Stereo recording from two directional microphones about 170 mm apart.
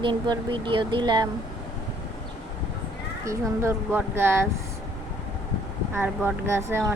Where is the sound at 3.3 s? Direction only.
15° right (ahead or behind).